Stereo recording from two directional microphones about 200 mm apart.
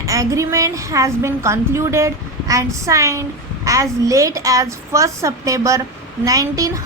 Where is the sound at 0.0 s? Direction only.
15° right (ahead or behind).